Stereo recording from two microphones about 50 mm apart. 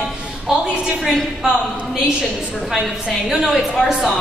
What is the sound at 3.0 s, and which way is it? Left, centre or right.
A woman's voice, centre.